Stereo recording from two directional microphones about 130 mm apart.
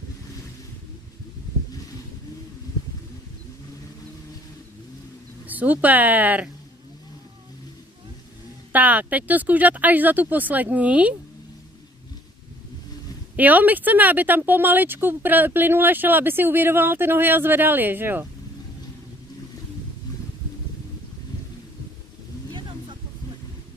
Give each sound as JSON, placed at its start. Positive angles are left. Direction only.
{"t": 5.5, "sound": "speech", "side_deg": -10}
{"t": 8.7, "sound": "speech", "side_deg": -10}
{"t": 13.4, "sound": "speech", "side_deg": -10}
{"t": 22.5, "sound": "a sound", "side_deg": -40}